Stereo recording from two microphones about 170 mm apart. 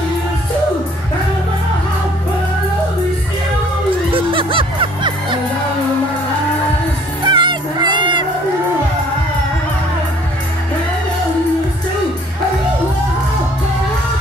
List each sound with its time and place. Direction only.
4.1 s music: 30° right (ahead or behind)
7.2 s music: 25° right (ahead or behind)